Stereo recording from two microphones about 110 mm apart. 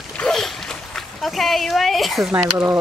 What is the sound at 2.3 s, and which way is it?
Speech, 20° right (ahead or behind).